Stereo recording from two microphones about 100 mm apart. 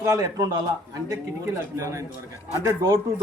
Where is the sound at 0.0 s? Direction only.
30° right (ahead or behind).